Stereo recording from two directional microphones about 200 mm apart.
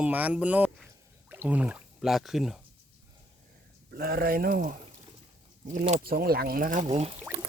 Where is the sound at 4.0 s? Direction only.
50° right (ahead or behind).